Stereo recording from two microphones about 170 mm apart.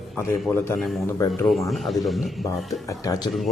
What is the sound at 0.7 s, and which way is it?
Speech, centre (ahead or behind).